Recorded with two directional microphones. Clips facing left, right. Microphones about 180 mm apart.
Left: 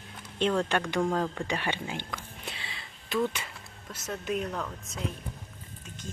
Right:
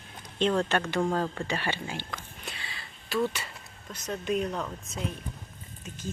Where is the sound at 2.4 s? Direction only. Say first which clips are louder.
Left 1 dB; 25° left (ahead or behind).